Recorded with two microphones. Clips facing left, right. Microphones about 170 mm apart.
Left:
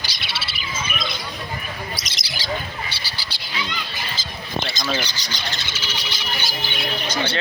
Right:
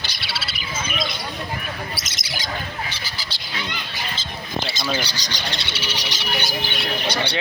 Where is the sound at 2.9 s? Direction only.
30° left (ahead or behind).